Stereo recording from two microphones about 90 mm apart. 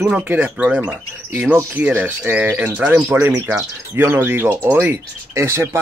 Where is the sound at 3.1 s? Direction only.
30° right (ahead or behind).